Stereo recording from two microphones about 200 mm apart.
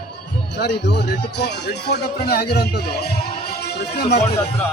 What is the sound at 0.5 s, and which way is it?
Speech, 55° left (ahead or behind).